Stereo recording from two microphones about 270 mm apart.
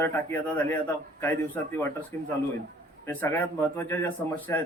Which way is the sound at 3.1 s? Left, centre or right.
Centre.